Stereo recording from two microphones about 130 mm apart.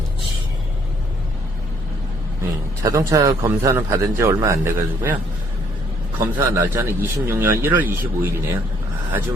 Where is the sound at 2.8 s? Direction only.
25° right (ahead or behind).